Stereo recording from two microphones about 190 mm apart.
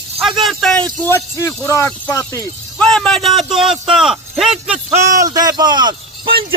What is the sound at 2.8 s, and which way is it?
A man's voice, 5° left (ahead or behind).